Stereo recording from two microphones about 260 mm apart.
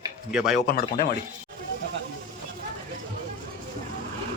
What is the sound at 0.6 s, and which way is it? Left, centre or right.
Speech, left.